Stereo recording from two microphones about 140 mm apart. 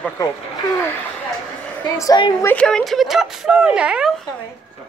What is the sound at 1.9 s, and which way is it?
Speech, 25° left (ahead or behind).